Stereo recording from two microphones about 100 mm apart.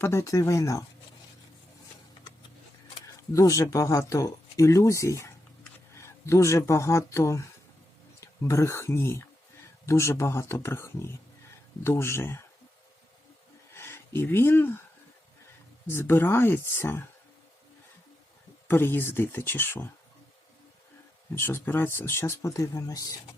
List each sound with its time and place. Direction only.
0.0 s speech: 30° left (ahead or behind)
3.3 s speech: 35° left (ahead or behind)
13.7 s speech: 25° left (ahead or behind)
15.9 s speech: 25° left (ahead or behind)
18.7 s speech: 25° left (ahead or behind)
21.3 s speech: 25° left (ahead or behind)